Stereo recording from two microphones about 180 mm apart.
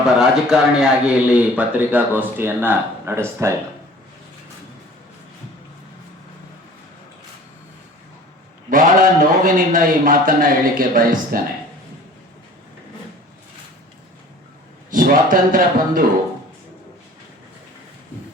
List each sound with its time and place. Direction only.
0.2 s a man's voice: 5° right (ahead or behind)
8.7 s a man's voice: 45° right (ahead or behind)
14.9 s a man's voice: 50° right (ahead or behind)